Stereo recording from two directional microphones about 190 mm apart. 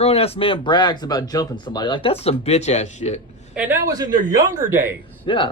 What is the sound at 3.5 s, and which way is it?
A woman's voice, 10° right (ahead or behind).